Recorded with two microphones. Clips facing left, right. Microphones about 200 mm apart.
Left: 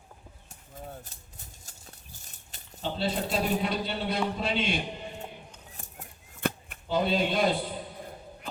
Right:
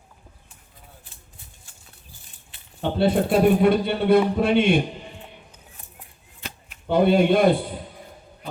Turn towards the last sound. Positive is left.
turn(degrees=-55)  # may be behind; listen again after turning